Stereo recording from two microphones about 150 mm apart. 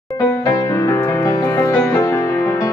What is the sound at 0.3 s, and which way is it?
Music, 20° left (ahead or behind).